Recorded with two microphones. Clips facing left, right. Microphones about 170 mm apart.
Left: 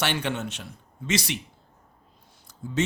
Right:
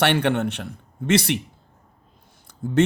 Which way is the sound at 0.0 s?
60° right (ahead or behind).